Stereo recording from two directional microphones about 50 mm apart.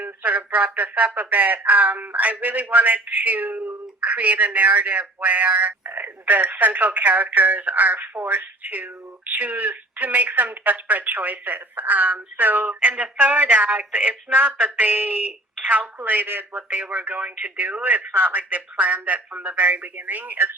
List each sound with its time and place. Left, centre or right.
0.0 s speech: right
12.9 s speech: right